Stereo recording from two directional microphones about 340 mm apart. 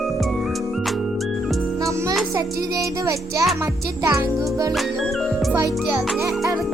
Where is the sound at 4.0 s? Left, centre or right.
Centre.